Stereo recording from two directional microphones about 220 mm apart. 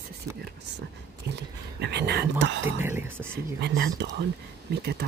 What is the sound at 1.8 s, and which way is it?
Speech, 50° right (ahead or behind).